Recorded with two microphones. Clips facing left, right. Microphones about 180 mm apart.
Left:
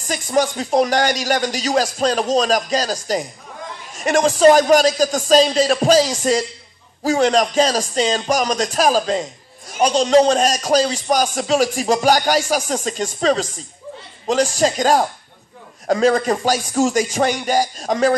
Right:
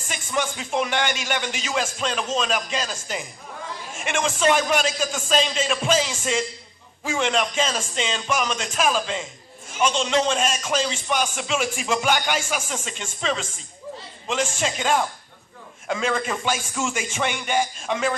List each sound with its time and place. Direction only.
0.1 s speech: 40° left (ahead or behind)